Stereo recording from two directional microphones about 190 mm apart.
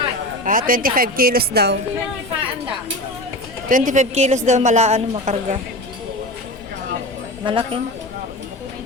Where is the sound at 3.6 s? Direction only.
45° right (ahead or behind).